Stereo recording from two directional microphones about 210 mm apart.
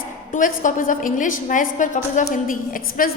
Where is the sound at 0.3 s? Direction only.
40° left (ahead or behind).